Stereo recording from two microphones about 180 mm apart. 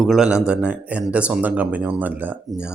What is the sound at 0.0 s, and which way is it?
Speech, centre (ahead or behind).